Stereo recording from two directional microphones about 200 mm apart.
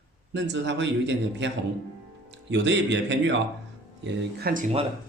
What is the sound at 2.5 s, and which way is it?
Speech, 60° right (ahead or behind).